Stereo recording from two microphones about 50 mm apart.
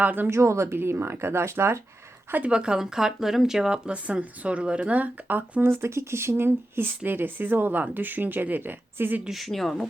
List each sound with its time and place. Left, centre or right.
0.0 s speech: right
0.3 s speech: right
0.8 s speech: right
2.5 s speech: centre
3.8 s speech: right
5.8 s speech: right
9.3 s speech: centre